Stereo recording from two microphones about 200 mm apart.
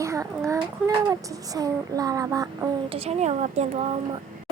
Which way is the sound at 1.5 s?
20° right (ahead or behind).